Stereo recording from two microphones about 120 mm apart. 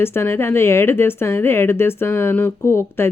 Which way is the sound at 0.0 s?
20° left (ahead or behind).